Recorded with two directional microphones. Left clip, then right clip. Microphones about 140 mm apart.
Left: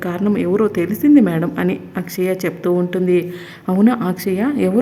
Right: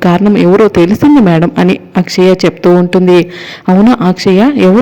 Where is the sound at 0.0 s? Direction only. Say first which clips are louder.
Right 12 dB; 50° right (ahead or behind).